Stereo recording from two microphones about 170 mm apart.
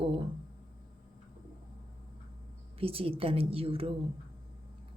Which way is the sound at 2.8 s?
35° right (ahead or behind).